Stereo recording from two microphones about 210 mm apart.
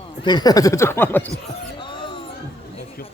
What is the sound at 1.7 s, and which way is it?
Music, 20° left (ahead or behind).